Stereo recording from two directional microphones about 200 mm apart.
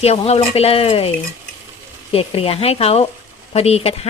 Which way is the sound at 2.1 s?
30° left (ahead or behind).